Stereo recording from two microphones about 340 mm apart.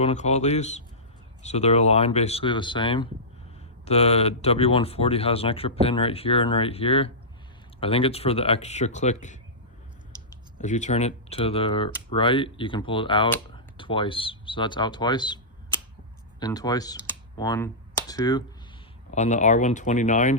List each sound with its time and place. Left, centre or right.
0.0 s speech: centre
10.6 s speech: left